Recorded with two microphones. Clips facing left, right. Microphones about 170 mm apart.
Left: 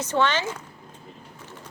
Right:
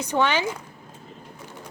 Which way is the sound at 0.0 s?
15° right (ahead or behind).